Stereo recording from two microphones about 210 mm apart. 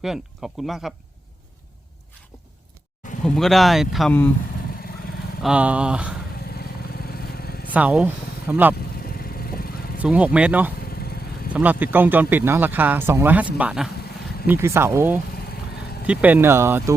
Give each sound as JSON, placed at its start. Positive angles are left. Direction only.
{"t": 0.0, "sound": "speech", "side_deg": 0}
{"t": 3.2, "sound": "speech", "side_deg": 0}
{"t": 5.4, "sound": "speech", "side_deg": -5}
{"t": 7.7, "sound": "speech", "side_deg": -5}
{"t": 9.0, "sound": "vehicle", "side_deg": 45}
{"t": 10.0, "sound": "speech", "side_deg": -5}